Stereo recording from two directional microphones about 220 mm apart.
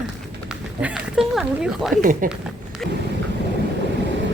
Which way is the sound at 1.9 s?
35° right (ahead or behind).